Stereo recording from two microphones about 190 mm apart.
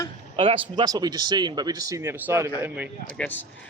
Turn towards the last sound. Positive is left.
turn(degrees=10)  # may be behind; listen again after turning